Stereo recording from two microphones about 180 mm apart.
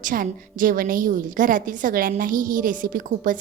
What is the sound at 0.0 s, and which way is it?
A woman's voice, 50° right (ahead or behind).